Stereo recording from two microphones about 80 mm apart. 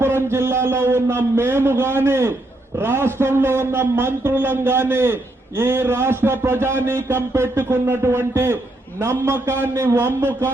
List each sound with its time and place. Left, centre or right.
0.0 s a man's voice: right